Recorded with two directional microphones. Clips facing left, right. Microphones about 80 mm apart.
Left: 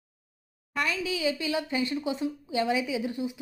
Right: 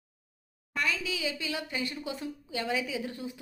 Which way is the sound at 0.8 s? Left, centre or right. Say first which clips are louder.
Left 3 dB; left.